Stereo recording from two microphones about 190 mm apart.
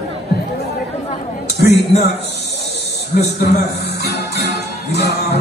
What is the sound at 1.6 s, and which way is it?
Speech, 60° left (ahead or behind).